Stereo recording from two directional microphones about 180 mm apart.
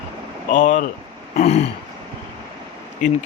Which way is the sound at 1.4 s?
35° left (ahead or behind).